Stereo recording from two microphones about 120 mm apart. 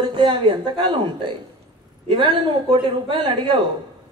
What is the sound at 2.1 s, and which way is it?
A woman's voice, 45° right (ahead or behind).